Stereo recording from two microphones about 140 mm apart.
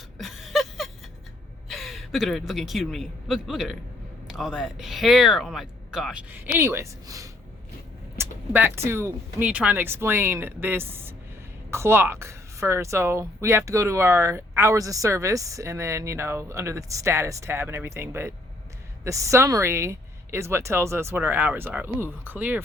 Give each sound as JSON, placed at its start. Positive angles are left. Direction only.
{"t": 0.2, "sound": "a sound", "side_deg": 0}
{"t": 1.6, "sound": "a man's voice", "side_deg": 0}
{"t": 6.3, "sound": "a woman's voice", "side_deg": -15}